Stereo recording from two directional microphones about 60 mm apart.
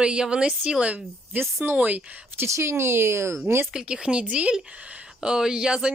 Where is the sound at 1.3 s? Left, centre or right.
Right.